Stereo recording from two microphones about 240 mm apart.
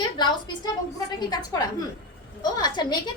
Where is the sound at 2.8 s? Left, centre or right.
Centre.